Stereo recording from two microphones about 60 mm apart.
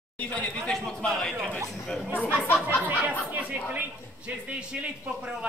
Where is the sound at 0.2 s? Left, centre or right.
Left.